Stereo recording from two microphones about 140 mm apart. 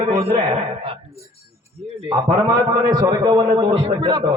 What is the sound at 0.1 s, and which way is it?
Speech, 45° right (ahead or behind).